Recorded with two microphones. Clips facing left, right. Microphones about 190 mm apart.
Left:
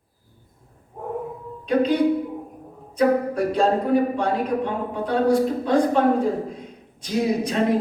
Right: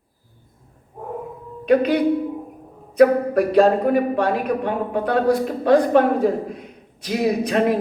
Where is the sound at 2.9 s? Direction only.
65° right (ahead or behind).